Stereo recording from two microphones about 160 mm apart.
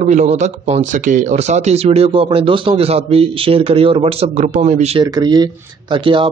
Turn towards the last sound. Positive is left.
turn(degrees=-30)  # may be behind; listen again after turning